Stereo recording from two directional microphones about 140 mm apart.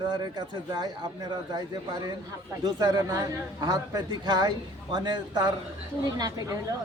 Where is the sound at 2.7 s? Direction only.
25° right (ahead or behind).